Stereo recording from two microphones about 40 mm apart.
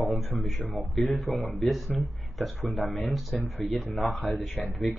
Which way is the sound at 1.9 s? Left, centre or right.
Centre.